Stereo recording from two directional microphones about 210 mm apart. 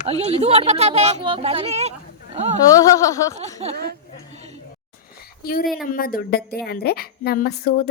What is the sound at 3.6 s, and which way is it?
Speech, 30° right (ahead or behind).